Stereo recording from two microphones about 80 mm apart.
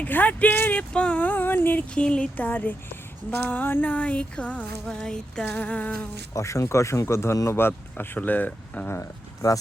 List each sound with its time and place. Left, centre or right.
0.0 s speech: left
2.0 s speech: centre
3.2 s music: left
6.3 s speech: left
7.9 s speech: left
8.9 s speech: left